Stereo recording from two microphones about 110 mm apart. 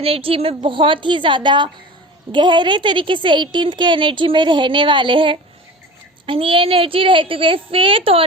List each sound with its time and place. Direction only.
0.0 s a woman's voice: 60° right (ahead or behind)